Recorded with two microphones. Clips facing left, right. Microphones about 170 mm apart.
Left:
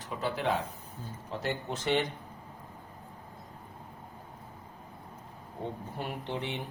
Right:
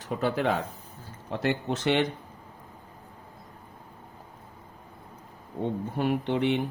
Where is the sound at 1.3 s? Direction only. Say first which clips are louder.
Right 7 dB; 70° right (ahead or behind).